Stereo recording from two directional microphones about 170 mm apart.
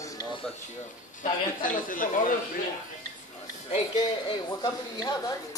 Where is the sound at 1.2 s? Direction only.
55° left (ahead or behind).